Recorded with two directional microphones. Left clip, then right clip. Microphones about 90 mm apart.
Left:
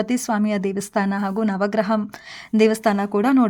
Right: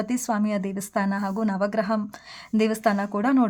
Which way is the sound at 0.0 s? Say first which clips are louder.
Left 4 dB; 30° left (ahead or behind).